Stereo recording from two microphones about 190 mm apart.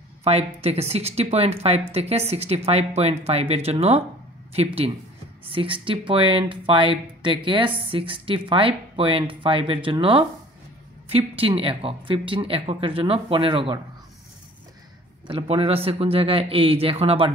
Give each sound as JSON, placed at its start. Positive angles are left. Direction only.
{"t": 0.2, "sound": "speech", "side_deg": -30}
{"t": 15.2, "sound": "speech", "side_deg": -30}